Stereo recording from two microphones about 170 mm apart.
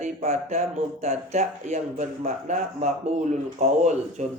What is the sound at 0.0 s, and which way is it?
Speech, 40° right (ahead or behind).